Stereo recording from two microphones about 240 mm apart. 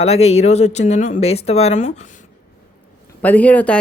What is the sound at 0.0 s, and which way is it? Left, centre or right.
Speech, left.